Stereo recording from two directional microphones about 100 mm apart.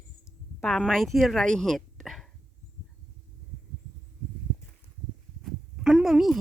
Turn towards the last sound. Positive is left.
turn(degrees=-5)  # may be behind; listen again after turning